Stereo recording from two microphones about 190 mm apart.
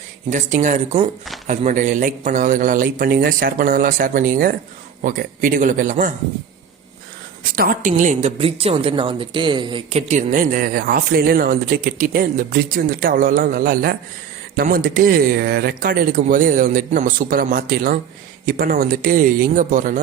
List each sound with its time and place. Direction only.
0.3 s speech: 40° right (ahead or behind)
7.5 s a woman's voice: 50° right (ahead or behind); by 10.0 s 25° right (ahead or behind)
10.1 s speech: 45° right (ahead or behind)